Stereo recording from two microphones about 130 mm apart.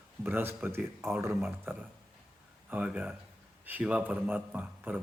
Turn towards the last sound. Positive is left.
turn(degrees=-10)  # may be behind; listen again after turning